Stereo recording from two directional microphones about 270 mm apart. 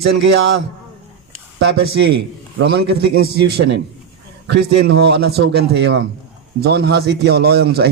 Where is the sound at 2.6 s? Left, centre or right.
Right.